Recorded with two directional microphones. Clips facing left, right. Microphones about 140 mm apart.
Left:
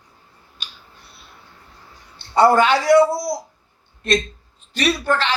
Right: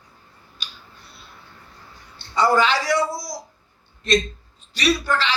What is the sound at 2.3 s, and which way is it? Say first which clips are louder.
A man's voice: left 4 dB; 55° left (ahead or behind).